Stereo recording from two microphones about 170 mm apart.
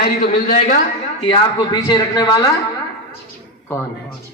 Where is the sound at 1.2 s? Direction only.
25° left (ahead or behind).